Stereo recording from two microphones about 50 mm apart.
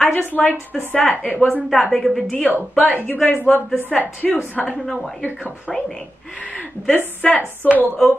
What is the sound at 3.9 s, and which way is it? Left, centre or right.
A woman's voice, centre.